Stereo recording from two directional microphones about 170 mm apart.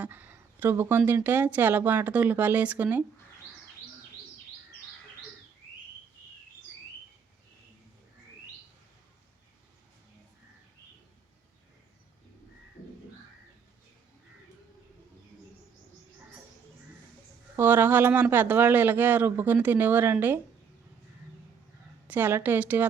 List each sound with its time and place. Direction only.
0.0 s speech: 10° right (ahead or behind)
17.6 s speech: 10° right (ahead or behind)
22.0 s speech: 10° right (ahead or behind)